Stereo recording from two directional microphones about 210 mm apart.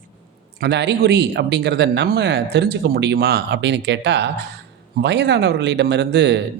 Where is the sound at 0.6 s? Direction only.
55° right (ahead or behind).